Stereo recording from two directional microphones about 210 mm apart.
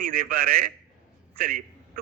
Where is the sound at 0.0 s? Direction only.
45° right (ahead or behind).